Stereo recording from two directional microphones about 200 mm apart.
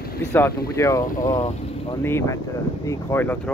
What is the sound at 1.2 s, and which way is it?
Speech, 35° left (ahead or behind).